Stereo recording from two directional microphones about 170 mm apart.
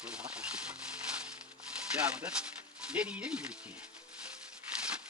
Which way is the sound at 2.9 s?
5° right (ahead or behind).